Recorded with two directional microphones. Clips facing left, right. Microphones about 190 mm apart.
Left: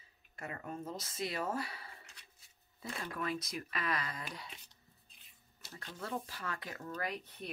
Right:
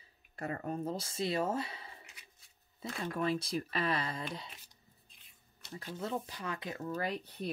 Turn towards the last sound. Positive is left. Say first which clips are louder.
# right 4 dB
turn(degrees=-30)  # may be behind; listen again after turning